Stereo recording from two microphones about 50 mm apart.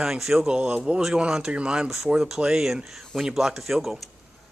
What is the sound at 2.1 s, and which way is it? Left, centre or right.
A man's voice, centre.